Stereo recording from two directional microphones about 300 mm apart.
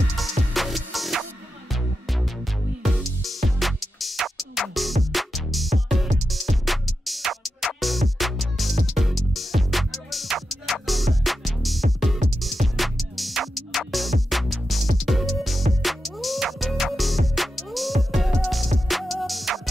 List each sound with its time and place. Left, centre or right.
0.5 s music: centre